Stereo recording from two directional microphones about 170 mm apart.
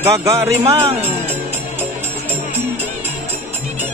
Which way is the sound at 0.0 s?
20° right (ahead or behind).